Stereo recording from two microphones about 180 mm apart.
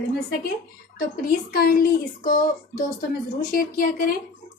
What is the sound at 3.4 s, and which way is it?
Speech, 50° left (ahead or behind).